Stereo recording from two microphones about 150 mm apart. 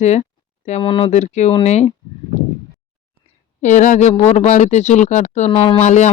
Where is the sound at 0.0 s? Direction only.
50° left (ahead or behind).